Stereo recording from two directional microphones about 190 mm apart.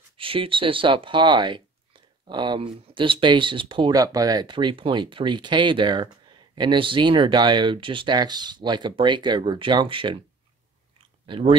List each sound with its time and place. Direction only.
0.2 s speech: 30° right (ahead or behind)
11.2 s speech: 25° right (ahead or behind)